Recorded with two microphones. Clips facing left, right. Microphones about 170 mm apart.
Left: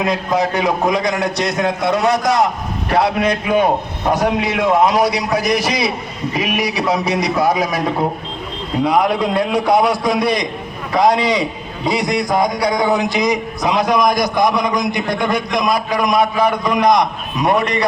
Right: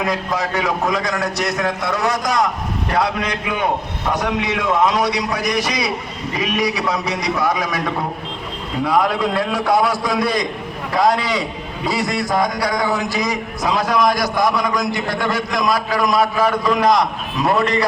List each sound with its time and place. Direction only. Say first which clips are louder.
0.0 s a man's voice: left 4 dB; 20° left (ahead or behind)
8.8 s a man's voice: left 2 dB; 20° left (ahead or behind)